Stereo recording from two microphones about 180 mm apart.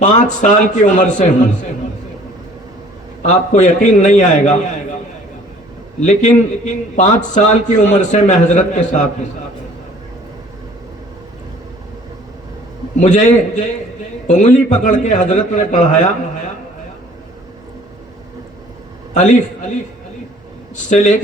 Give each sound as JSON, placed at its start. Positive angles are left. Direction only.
{"t": 0.0, "sound": "a man's voice", "side_deg": 45}
{"t": 3.2, "sound": "a man's voice", "side_deg": 40}
{"t": 6.0, "sound": "a man's voice", "side_deg": 40}
{"t": 13.0, "sound": "a man's voice", "side_deg": 40}
{"t": 19.1, "sound": "a man's voice", "side_deg": 45}
{"t": 20.9, "sound": "a man's voice", "side_deg": 40}